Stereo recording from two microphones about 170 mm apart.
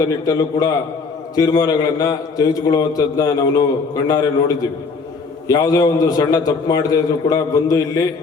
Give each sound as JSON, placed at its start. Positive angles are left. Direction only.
{"t": 0.3, "sound": "a man's voice", "side_deg": 20}